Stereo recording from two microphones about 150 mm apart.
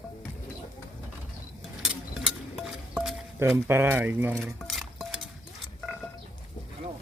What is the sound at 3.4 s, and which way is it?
Speech, 15° right (ahead or behind).